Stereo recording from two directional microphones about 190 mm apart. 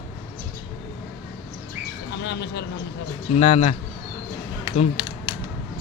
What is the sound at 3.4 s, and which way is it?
Speech, 35° left (ahead or behind).